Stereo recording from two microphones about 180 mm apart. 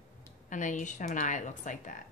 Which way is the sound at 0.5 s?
45° left (ahead or behind).